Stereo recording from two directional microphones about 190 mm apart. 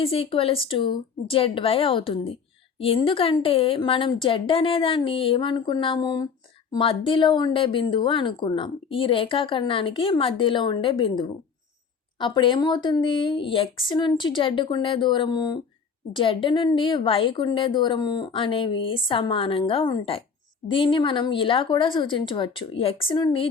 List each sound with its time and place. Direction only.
0.0 s speech: 30° left (ahead or behind)